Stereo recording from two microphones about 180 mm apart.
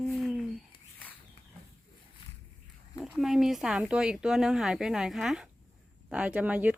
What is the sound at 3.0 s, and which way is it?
Speech, centre (ahead or behind).